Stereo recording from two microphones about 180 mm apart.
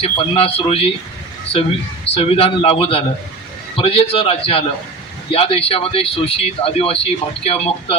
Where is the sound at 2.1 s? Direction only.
35° left (ahead or behind).